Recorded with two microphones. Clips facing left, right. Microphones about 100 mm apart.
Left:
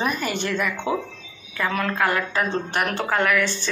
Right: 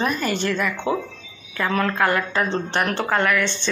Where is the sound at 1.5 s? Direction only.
Centre (ahead or behind).